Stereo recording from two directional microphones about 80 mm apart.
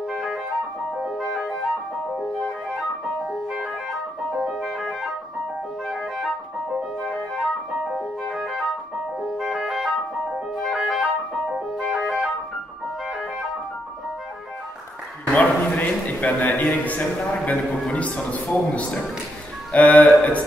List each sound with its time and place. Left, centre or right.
0.1 s music: centre
4.4 s music: centre
9.4 s music: centre
15.3 s a man's voice: centre